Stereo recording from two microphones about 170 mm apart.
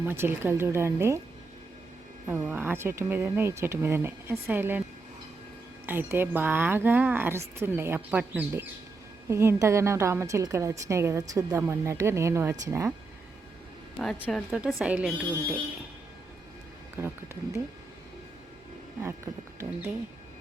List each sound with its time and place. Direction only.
0.0 s a woman's voice: 15° right (ahead or behind)
2.2 s a woman's voice: 10° right (ahead or behind)
5.8 s a woman's voice: 10° right (ahead or behind)
14.0 s a woman's voice: centre (ahead or behind)
17.0 s a woman's voice: 15° right (ahead or behind)
19.0 s a woman's voice: 15° right (ahead or behind)